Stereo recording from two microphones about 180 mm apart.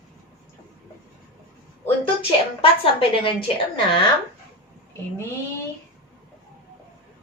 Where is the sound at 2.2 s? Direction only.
30° left (ahead or behind).